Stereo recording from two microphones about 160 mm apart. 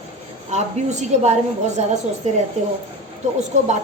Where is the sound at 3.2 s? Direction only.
50° right (ahead or behind).